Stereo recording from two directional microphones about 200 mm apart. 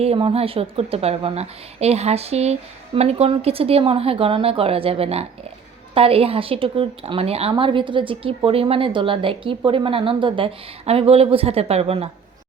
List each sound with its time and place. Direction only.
0.0 s a woman's voice: 30° right (ahead or behind)